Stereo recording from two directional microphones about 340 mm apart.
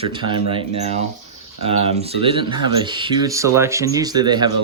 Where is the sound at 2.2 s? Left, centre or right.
Centre.